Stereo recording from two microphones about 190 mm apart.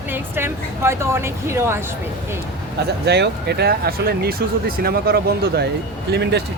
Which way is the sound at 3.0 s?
60° right (ahead or behind).